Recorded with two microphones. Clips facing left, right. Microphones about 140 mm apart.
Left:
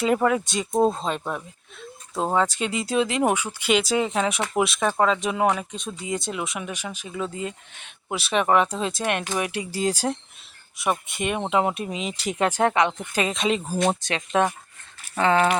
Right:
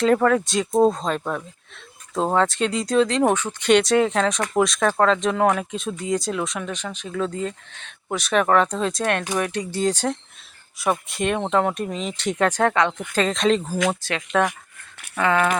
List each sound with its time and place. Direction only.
0.0 s speech: 10° left (ahead or behind)
12.5 s speech: 25° left (ahead or behind)
12.7 s speech: 15° left (ahead or behind)
14.0 s speech: 20° left (ahead or behind)
15.1 s a sound: 30° left (ahead or behind)